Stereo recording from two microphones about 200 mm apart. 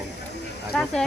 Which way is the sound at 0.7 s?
Centre (ahead or behind).